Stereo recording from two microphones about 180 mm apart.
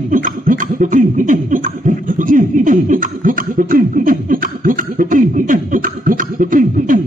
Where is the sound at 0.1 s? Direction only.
50° right (ahead or behind).